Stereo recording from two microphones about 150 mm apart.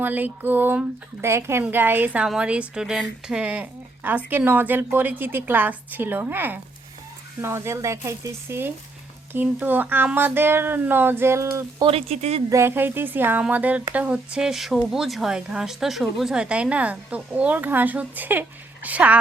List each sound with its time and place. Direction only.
0.0 s speech: 10° right (ahead or behind)
11.8 s speech: 40° right (ahead or behind)
12.5 s speech: 20° right (ahead or behind)